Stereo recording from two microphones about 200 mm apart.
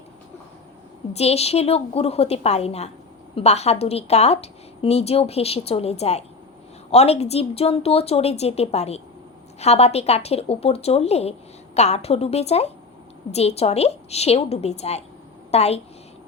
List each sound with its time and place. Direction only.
1.1 s a woman's voice: 30° left (ahead or behind)